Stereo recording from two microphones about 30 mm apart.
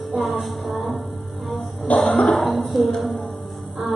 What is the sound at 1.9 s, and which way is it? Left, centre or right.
Music, left.